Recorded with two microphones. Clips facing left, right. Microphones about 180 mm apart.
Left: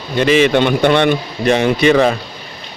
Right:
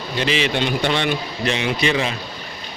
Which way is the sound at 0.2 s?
50° left (ahead or behind).